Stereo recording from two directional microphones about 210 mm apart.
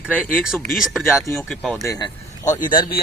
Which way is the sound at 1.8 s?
15° left (ahead or behind).